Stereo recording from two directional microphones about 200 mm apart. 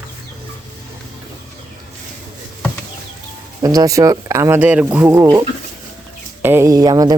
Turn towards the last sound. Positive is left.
turn(degrees=-20)  # may be behind; listen again after turning